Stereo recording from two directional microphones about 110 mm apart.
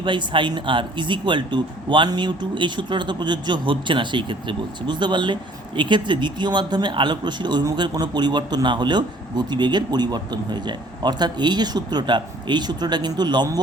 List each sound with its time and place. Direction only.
0.0 s speech: 45° right (ahead or behind)